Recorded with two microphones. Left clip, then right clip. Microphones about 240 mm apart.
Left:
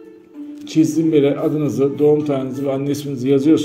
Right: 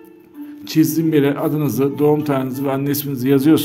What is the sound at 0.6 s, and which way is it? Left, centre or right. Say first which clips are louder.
A man's voice: even; right.